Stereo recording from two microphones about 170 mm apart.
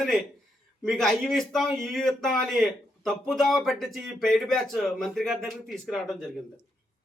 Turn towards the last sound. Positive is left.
turn(degrees=5)  # may be behind; listen again after turning